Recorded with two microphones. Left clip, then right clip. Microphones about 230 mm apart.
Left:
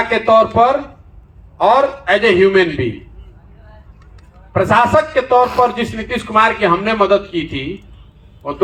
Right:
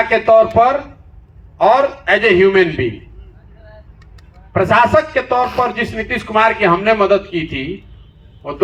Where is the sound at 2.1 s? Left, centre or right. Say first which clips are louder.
Even; right.